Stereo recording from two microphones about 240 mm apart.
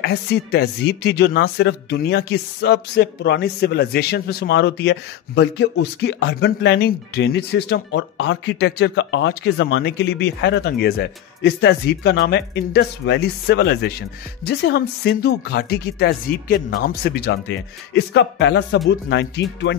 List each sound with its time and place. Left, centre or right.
0.0 s speech: left